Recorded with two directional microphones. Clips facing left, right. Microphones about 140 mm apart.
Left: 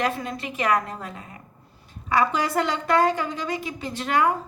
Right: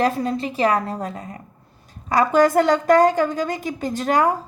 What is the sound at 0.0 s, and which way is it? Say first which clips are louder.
A woman's voice: right 6 dB; 35° right (ahead or behind).